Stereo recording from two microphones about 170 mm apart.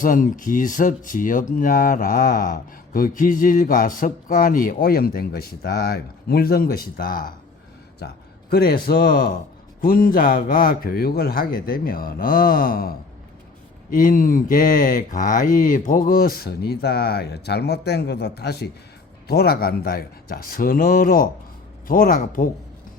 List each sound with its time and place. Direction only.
0.0 s speech: 55° left (ahead or behind)
7.9 s speech: 70° left (ahead or behind); by 22.4 s 50° left (ahead or behind)